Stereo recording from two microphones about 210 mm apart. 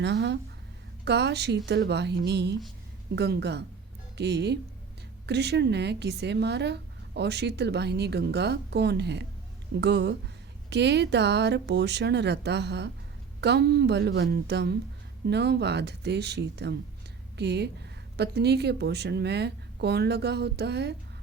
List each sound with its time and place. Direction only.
0.0 s a woman's voice: 55° right (ahead or behind)